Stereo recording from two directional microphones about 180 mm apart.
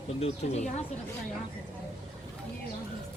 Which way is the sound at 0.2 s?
40° left (ahead or behind).